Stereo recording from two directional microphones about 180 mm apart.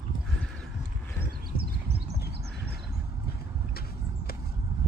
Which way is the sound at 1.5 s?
60° right (ahead or behind).